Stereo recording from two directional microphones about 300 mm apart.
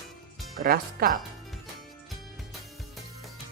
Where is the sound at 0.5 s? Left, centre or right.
Right.